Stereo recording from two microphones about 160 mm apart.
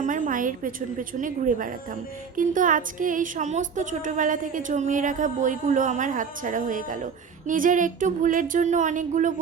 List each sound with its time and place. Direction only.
0.0 s a woman's voice: 55° right (ahead or behind)